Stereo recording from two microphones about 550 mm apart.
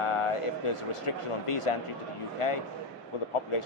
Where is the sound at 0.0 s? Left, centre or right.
Left.